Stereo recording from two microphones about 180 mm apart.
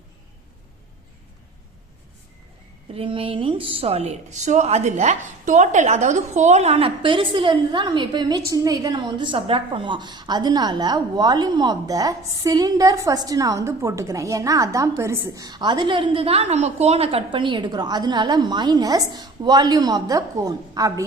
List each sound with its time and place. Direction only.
2.9 s a woman's voice: 30° right (ahead or behind)